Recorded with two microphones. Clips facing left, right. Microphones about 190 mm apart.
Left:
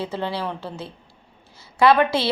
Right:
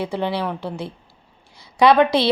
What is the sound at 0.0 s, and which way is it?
A woman's voice, 15° right (ahead or behind).